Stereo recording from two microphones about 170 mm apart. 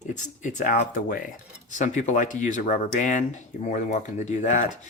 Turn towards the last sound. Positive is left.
turn(degrees=50)  # may be behind; listen again after turning